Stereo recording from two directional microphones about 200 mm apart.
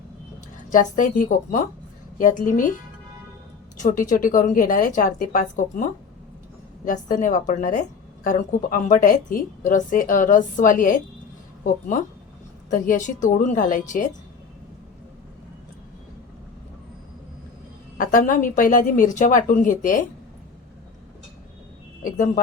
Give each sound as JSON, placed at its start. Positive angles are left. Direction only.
{"t": 0.7, "sound": "a woman's voice", "side_deg": 40}
{"t": 3.8, "sound": "a woman's voice", "side_deg": 40}
{"t": 12.7, "sound": "a woman's voice", "side_deg": 40}
{"t": 17.9, "sound": "a woman's voice", "side_deg": 40}